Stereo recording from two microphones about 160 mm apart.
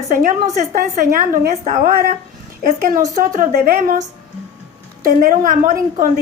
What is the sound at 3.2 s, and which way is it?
Speech, 60° right (ahead or behind).